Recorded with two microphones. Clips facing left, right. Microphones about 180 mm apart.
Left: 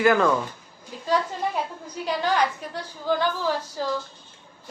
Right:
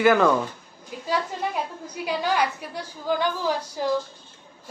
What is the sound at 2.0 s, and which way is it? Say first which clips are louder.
A woman's voice: left 1 dB; 10° right (ahead or behind).